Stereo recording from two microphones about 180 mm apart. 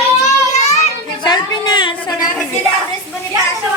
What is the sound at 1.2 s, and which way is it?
Speech, 25° left (ahead or behind).